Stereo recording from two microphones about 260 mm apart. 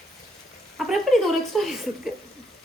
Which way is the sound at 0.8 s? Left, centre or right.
Centre.